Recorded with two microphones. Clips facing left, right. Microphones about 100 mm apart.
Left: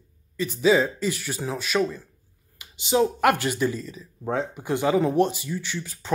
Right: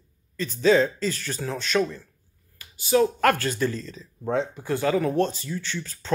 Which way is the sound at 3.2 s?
10° left (ahead or behind).